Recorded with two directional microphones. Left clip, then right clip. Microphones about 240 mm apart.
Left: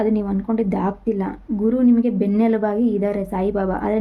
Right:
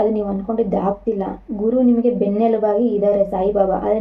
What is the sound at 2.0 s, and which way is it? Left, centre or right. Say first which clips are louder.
A woman's voice: right 3 dB; left.